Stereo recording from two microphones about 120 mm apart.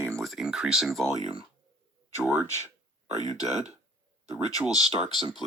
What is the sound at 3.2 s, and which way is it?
Speech, 30° left (ahead or behind).